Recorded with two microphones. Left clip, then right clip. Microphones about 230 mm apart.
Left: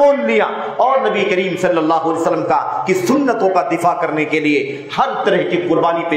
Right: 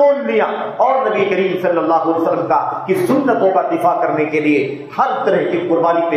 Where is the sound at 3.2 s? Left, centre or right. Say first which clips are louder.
Right 2 dB; left.